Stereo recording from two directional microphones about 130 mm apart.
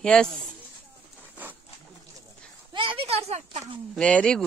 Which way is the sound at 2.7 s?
40° right (ahead or behind).